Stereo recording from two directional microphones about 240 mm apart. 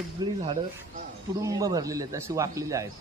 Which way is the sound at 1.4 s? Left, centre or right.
Centre.